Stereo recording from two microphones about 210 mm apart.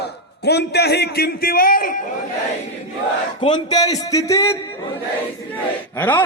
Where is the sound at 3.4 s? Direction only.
20° left (ahead or behind).